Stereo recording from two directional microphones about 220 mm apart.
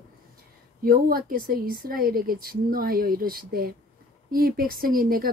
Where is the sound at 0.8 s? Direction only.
40° right (ahead or behind).